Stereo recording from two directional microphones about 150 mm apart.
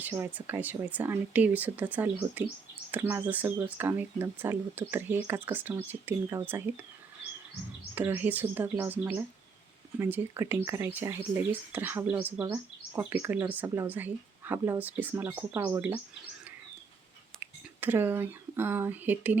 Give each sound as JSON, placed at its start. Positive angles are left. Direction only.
{"t": 0.0, "sound": "speech", "side_deg": -15}
{"t": 7.9, "sound": "speech", "side_deg": -15}
{"t": 17.4, "sound": "speech", "side_deg": -15}